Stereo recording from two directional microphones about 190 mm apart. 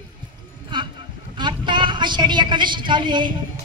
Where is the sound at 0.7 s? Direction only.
25° right (ahead or behind).